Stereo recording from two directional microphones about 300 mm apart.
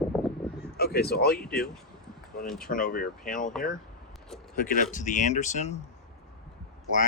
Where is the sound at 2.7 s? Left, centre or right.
Left.